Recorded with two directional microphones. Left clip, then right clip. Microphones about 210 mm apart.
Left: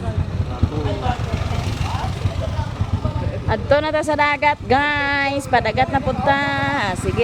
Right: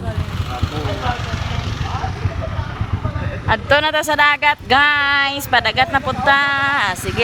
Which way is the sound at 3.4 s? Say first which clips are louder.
Right 3 dB; 5° left (ahead or behind).